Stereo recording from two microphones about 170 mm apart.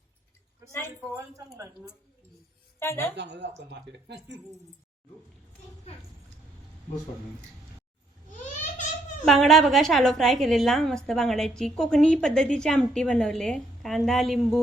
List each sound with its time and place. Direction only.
2.7 s a woman's voice: 15° left (ahead or behind)
3.2 s speech: 90° right
9.2 s a woman's voice: centre (ahead or behind)